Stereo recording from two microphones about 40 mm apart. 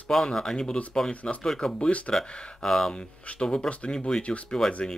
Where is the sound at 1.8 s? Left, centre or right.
Left.